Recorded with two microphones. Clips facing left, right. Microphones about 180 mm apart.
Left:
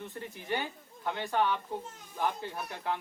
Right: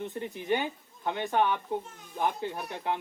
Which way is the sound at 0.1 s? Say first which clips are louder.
Right 4 dB; 20° right (ahead or behind).